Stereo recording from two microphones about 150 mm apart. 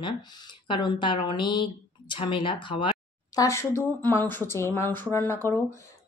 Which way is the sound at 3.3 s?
20° left (ahead or behind).